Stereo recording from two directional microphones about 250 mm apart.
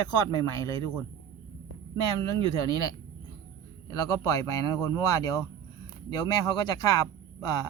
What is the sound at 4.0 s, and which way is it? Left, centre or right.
Speech, centre.